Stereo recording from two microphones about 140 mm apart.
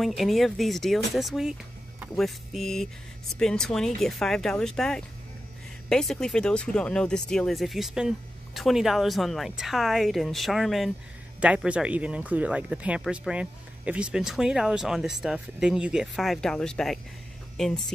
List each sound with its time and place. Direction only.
0.0 s speech: centre (ahead or behind)